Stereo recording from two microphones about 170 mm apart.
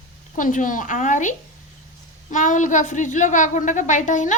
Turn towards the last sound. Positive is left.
turn(degrees=45)  # may be behind; listen again after turning